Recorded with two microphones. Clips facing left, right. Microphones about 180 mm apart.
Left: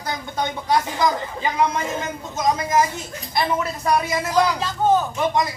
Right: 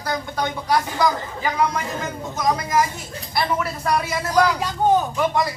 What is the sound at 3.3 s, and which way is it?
Speech, 20° left (ahead or behind).